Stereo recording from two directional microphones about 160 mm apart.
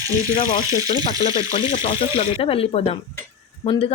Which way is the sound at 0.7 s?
20° right (ahead or behind).